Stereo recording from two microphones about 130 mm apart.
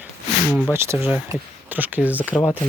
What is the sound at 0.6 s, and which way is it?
Speech, 15° right (ahead or behind).